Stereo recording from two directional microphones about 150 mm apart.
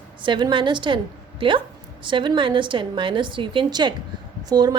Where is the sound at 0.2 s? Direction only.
30° right (ahead or behind).